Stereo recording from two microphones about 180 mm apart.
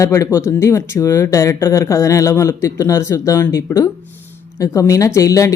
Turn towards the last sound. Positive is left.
turn(degrees=20)  # may be behind; listen again after turning